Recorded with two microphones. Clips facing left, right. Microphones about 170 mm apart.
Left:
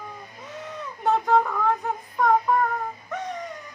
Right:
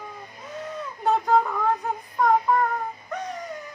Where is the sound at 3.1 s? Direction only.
Centre (ahead or behind).